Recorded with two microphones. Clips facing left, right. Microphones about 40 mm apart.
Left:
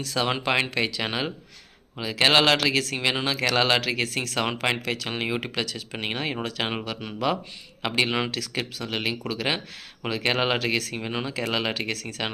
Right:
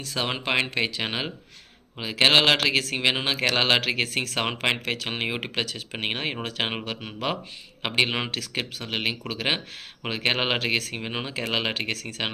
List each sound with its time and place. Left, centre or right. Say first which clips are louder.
0.0 s a man's voice: left 3 dB; centre